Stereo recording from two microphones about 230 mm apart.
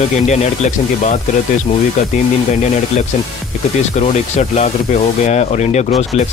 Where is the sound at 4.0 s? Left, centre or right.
Left.